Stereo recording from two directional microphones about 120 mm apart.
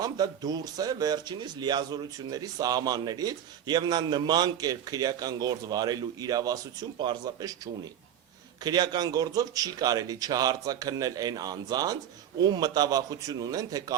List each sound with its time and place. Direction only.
0.0 s speech: 30° right (ahead or behind)